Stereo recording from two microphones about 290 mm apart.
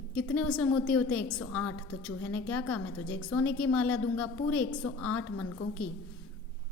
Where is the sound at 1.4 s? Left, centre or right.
Left.